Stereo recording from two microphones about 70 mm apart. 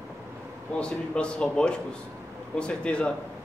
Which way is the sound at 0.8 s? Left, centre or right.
Centre.